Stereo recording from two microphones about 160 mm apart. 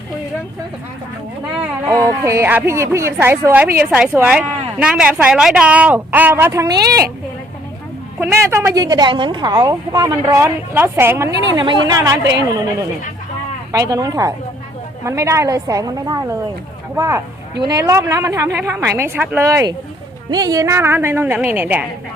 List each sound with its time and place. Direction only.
1.9 s speech: 20° right (ahead or behind)
8.2 s a woman's voice: 15° right (ahead or behind)
11.5 s a woman's voice: 30° right (ahead or behind)
12.2 s a woman's voice: 90° right
13.7 s a woman's voice: 20° right (ahead or behind)